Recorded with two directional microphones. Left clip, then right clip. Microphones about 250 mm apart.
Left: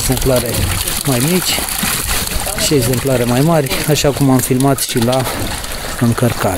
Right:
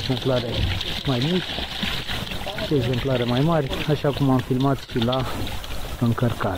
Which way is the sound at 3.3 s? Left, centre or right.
Left.